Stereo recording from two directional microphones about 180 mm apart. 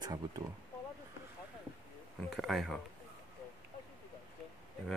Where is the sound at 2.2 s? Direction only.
Centre (ahead or behind).